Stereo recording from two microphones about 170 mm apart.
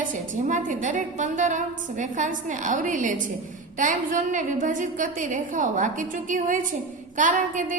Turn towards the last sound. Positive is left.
turn(degrees=-50)  # may be behind; listen again after turning